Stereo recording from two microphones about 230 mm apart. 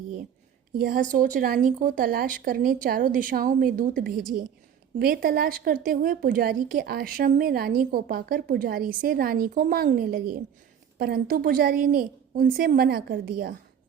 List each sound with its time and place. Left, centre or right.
0.8 s a woman's voice: right